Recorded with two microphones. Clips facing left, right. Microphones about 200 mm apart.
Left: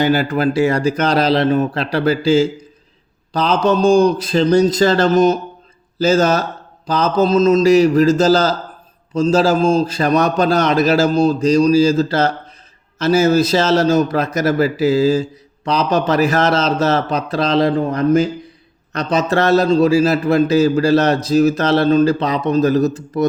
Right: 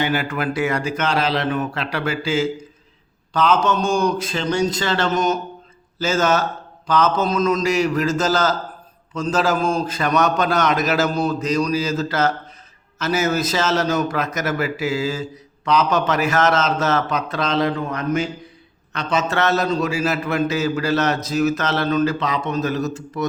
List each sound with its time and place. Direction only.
0.0 s a man's voice: 35° left (ahead or behind)